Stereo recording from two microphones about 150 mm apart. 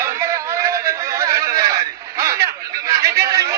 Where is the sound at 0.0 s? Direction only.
20° right (ahead or behind).